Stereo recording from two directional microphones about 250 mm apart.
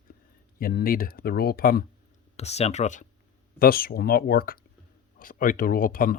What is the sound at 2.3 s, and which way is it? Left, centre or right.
Speech, left.